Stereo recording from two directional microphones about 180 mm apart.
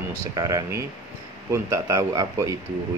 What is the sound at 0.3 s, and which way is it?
Speech, 20° right (ahead or behind).